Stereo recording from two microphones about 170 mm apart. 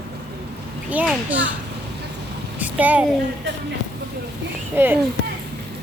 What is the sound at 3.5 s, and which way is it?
Speech, 90° right.